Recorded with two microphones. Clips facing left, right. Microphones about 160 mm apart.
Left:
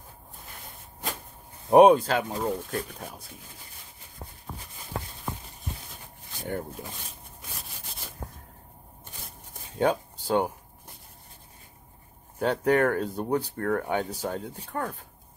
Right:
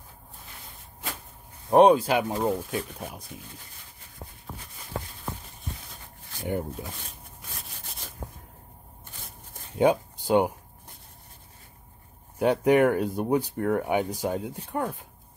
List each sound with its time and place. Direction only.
1.7 s speech: 5° left (ahead or behind)
2.0 s speech: 15° right (ahead or behind)
2.5 s speech: 5° right (ahead or behind)
9.8 s speech: 15° right (ahead or behind)
12.4 s speech: 15° right (ahead or behind)